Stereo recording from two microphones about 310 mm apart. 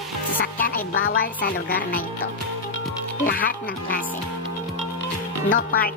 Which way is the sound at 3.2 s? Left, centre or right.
Left.